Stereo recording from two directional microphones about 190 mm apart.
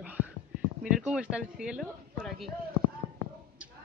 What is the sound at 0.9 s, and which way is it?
Speech, 5° right (ahead or behind).